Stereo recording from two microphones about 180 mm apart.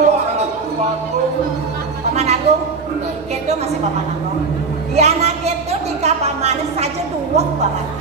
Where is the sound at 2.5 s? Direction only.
35° right (ahead or behind).